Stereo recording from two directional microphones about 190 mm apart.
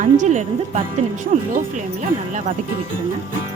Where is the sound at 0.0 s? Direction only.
40° right (ahead or behind).